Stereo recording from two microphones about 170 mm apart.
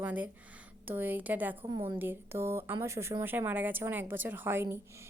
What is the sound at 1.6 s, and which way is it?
Speech, 35° right (ahead or behind).